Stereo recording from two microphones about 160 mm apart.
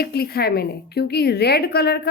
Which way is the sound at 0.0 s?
75° left (ahead or behind).